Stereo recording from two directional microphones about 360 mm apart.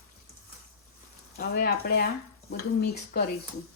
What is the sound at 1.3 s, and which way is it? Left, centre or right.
Speech, left.